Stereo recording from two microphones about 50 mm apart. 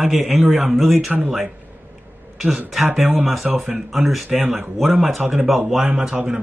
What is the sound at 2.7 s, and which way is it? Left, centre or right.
A man's voice, centre.